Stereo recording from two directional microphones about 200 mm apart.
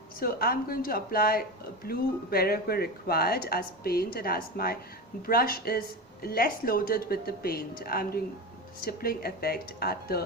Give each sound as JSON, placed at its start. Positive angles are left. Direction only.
{"t": 0.2, "sound": "speech", "side_deg": 50}